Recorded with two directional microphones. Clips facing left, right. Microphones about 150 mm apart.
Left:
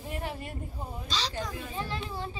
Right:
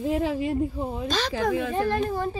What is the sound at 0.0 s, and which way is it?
Speech, 90° right.